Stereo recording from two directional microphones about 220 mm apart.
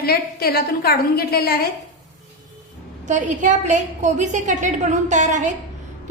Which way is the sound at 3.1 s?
35° right (ahead or behind).